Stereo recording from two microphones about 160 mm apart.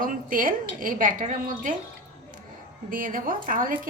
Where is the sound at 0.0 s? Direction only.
60° right (ahead or behind).